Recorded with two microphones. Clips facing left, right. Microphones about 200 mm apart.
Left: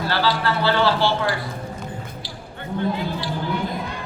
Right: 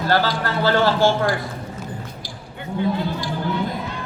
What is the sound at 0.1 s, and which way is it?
A man's voice, 45° right (ahead or behind).